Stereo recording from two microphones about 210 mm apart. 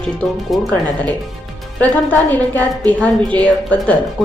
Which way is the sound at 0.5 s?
5° left (ahead or behind).